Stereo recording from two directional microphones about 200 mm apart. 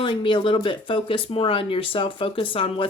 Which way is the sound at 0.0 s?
25° left (ahead or behind).